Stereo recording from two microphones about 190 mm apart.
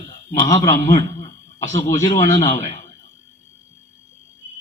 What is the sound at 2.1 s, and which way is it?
Speech, 40° left (ahead or behind).